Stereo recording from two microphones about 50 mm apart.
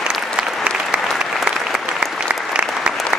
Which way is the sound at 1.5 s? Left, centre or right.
Centre.